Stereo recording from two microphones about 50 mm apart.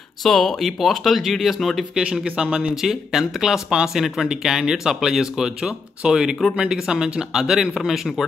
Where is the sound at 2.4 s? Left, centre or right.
Right.